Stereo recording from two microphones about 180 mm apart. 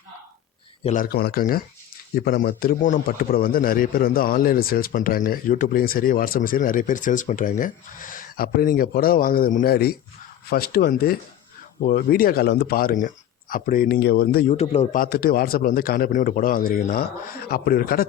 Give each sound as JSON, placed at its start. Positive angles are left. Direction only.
{"t": 0.9, "sound": "a man's voice", "side_deg": 50}
{"t": 14.5, "sound": "a man's voice", "side_deg": 35}
{"t": 14.9, "sound": "a man's voice", "side_deg": 55}